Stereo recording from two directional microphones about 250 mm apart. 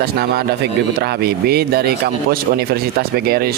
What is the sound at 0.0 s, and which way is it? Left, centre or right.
Speech, right.